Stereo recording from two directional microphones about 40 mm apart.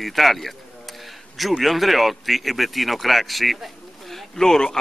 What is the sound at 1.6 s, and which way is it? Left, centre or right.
Speech, centre.